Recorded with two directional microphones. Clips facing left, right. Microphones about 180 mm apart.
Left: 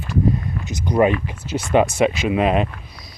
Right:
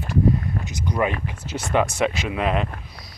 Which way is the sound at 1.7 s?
20° left (ahead or behind).